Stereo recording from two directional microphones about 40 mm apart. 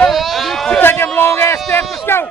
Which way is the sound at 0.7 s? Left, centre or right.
Left.